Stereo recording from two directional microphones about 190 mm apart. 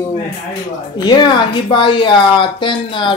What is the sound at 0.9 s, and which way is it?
A woman's voice, 20° left (ahead or behind).